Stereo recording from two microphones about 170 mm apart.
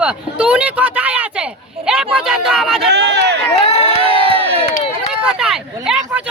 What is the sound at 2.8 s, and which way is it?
Speech, 80° right.